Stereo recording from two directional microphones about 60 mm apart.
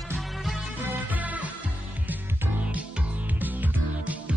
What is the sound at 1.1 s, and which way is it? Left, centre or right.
Music, right.